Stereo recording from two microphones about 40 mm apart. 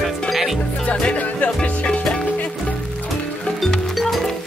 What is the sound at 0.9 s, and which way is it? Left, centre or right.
Music, left.